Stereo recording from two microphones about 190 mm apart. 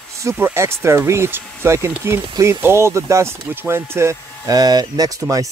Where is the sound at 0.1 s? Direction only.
15° right (ahead or behind).